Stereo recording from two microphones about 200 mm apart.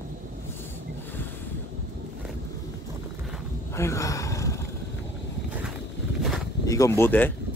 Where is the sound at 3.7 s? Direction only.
15° left (ahead or behind).